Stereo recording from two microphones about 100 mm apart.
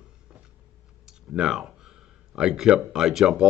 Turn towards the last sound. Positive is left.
turn(degrees=-5)  # may be behind; listen again after turning